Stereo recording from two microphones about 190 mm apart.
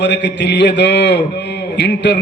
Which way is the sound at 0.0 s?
65° left (ahead or behind).